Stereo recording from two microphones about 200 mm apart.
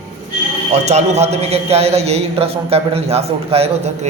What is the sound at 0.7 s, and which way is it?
A man's voice, 35° right (ahead or behind).